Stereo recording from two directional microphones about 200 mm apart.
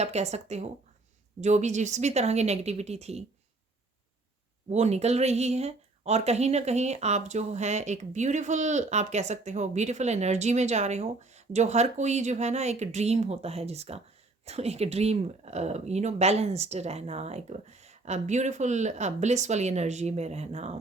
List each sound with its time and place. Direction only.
0.0 s speech: 35° right (ahead or behind)
4.7 s speech: 35° right (ahead or behind)